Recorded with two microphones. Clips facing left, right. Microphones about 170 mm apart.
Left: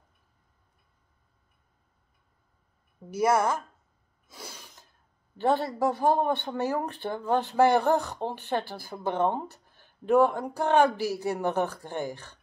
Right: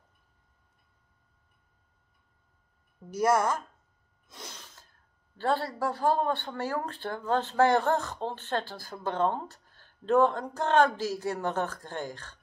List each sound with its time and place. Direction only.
3.1 s speech: 10° left (ahead or behind)
4.3 s a sound: 10° left (ahead or behind)
5.4 s speech: 15° left (ahead or behind)